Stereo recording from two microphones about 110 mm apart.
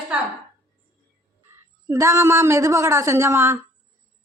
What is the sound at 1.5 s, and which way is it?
A woman's voice, 25° right (ahead or behind).